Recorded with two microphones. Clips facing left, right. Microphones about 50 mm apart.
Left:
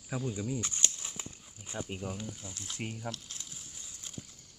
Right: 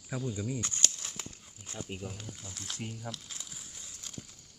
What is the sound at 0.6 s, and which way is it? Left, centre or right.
Speech, centre.